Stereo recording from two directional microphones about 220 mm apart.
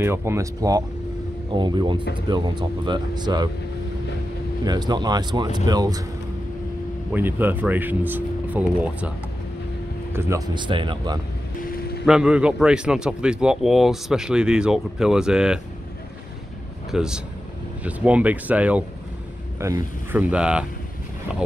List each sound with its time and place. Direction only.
0.0 s speech: 10° right (ahead or behind)
4.6 s speech: 20° right (ahead or behind)
7.1 s speech: 10° right (ahead or behind)
10.1 s speech: 15° right (ahead or behind)
12.1 s speech: 5° right (ahead or behind)
16.9 s speech: 5° right (ahead or behind)